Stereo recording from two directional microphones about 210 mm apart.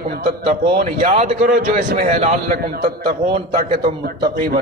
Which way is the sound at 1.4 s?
40° right (ahead or behind).